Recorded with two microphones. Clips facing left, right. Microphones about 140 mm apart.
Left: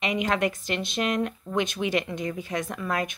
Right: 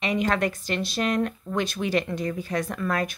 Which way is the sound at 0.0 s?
20° left (ahead or behind).